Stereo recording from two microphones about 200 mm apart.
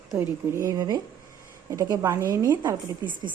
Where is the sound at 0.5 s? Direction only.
15° right (ahead or behind).